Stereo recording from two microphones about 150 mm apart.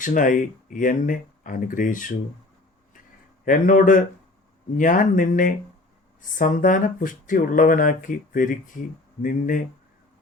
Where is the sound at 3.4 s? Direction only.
60° left (ahead or behind).